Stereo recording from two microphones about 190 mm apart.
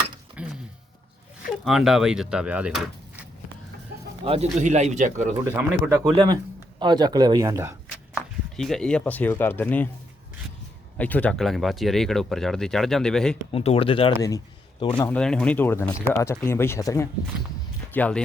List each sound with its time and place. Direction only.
0.4 s a sound: 5° right (ahead or behind)
1.5 s speech: centre (ahead or behind)
4.3 s speech: 35° right (ahead or behind)
5.5 s speech: 10° right (ahead or behind)
6.1 s speech: 20° right (ahead or behind)
8.5 s speech: centre (ahead or behind)
10.9 s speech: 5° left (ahead or behind)
13.5 s speech: 30° left (ahead or behind)
14.2 s a sound: 20° left (ahead or behind)
14.9 s speech: 5° left (ahead or behind)